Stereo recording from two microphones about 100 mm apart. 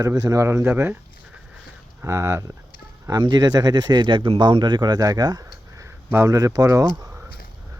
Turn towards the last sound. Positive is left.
turn(degrees=-25)  # may be behind; listen again after turning